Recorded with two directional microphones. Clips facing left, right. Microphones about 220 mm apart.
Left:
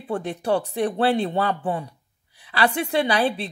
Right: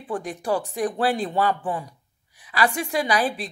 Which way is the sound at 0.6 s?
40° left (ahead or behind).